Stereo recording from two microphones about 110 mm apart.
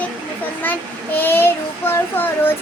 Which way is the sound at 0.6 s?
15° left (ahead or behind).